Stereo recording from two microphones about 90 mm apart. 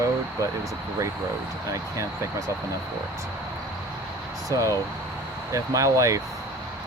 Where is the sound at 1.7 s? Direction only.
35° right (ahead or behind).